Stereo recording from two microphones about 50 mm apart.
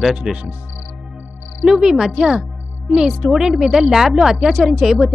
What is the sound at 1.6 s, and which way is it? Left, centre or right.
A woman's voice, centre.